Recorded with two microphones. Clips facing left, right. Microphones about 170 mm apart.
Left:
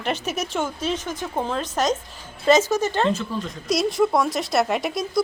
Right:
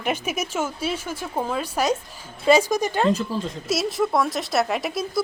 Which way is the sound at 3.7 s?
Centre (ahead or behind).